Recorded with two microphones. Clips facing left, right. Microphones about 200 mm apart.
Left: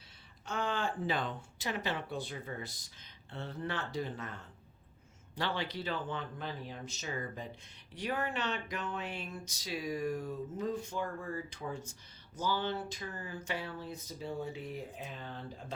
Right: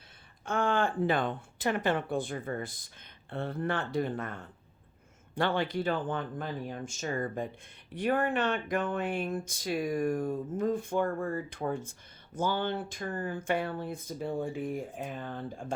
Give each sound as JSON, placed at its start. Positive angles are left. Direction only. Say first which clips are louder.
{"t": 0.4, "sound": "a woman's voice", "louder": "right 7 dB", "side_deg": -55}